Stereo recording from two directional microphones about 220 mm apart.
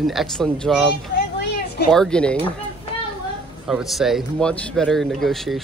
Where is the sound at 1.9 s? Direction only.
5° left (ahead or behind).